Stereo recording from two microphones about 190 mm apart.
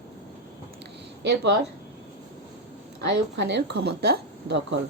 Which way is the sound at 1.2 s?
60° right (ahead or behind).